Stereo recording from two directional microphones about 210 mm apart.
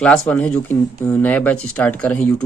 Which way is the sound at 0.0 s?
5° left (ahead or behind).